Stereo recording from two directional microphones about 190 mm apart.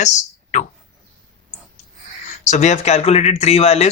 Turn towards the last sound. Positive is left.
turn(degrees=35)  # may be behind; listen again after turning